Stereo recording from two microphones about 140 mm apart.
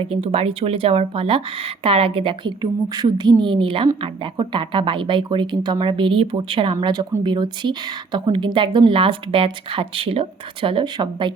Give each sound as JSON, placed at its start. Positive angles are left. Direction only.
{"t": 0.0, "sound": "speech", "side_deg": -45}
{"t": 6.7, "sound": "speech", "side_deg": -25}